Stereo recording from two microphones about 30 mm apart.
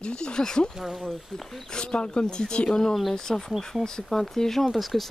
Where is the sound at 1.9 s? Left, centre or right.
Left.